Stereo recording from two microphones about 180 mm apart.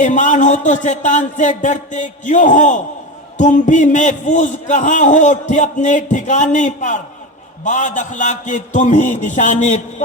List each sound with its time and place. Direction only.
0.0 s a man's voice: 45° left (ahead or behind)